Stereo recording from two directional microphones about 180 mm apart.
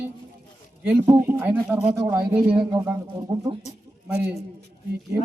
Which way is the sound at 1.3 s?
10° right (ahead or behind).